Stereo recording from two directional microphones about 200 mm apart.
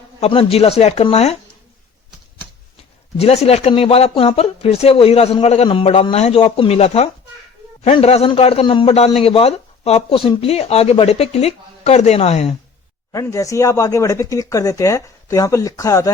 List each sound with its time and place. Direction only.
0.2 s a man's voice: 30° left (ahead or behind)
3.2 s a man's voice: 30° left (ahead or behind)
13.1 s speech: 15° left (ahead or behind)